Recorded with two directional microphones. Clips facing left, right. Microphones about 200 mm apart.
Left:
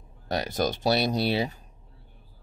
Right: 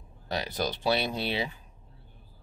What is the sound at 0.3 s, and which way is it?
Speech, 45° left (ahead or behind).